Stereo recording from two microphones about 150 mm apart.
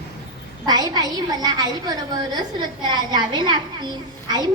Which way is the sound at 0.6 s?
25° right (ahead or behind).